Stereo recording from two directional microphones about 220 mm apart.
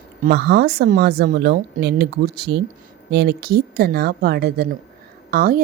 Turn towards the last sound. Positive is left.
turn(degrees=-40)  # may be behind; listen again after turning